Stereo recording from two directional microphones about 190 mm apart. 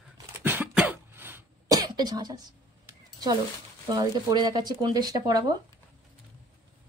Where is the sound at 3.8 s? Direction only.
20° right (ahead or behind).